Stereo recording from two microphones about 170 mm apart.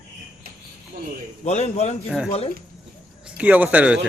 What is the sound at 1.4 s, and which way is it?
A man's voice, 40° left (ahead or behind).